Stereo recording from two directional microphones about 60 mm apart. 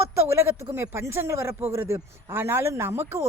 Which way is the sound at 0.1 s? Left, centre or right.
Right.